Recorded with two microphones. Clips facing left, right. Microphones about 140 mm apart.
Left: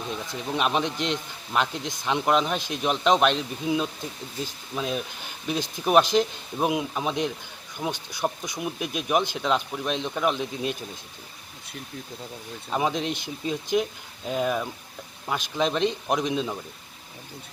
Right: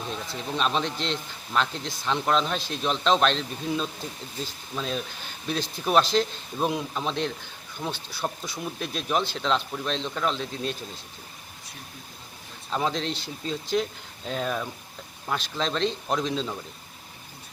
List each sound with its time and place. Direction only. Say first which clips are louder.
0.3 s speech: left 2 dB; 15° left (ahead or behind)
12.7 s speech: left 2 dB; 10° left (ahead or behind)